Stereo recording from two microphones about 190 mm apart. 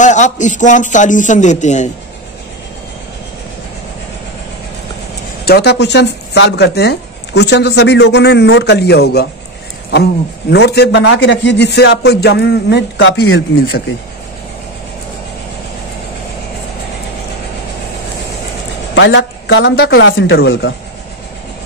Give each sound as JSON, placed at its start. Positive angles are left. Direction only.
{"t": 0.0, "sound": "a man's voice", "side_deg": 40}
{"t": 5.4, "sound": "speech", "side_deg": 60}
{"t": 10.5, "sound": "speech", "side_deg": 60}
{"t": 18.9, "sound": "speech", "side_deg": 70}